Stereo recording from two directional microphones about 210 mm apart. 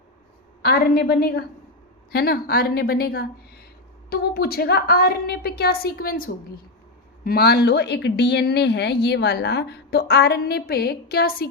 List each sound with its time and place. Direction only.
0.6 s a woman's voice: 45° left (ahead or behind)